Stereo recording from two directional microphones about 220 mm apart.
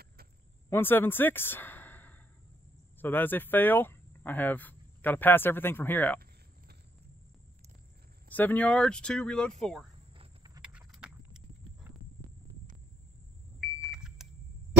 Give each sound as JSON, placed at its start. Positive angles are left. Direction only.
{"t": 0.7, "sound": "a woman's voice", "side_deg": 10}
{"t": 8.3, "sound": "speech", "side_deg": 10}
{"t": 10.1, "sound": "cricket", "side_deg": -20}
{"t": 10.6, "sound": "clip-clop", "side_deg": -5}
{"t": 13.6, "sound": "vehicle", "side_deg": -5}